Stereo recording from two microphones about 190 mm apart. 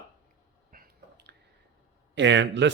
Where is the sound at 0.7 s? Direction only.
55° right (ahead or behind).